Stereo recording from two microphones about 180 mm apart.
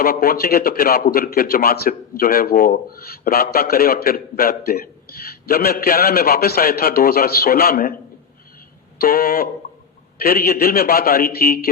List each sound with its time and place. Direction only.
0.0 s a man's voice: 55° left (ahead or behind)
9.0 s a man's voice: 55° left (ahead or behind)